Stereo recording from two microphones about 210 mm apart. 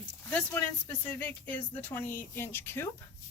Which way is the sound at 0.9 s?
10° left (ahead or behind).